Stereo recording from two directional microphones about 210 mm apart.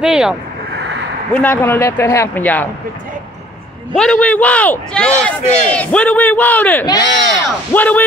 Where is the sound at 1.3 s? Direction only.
10° left (ahead or behind).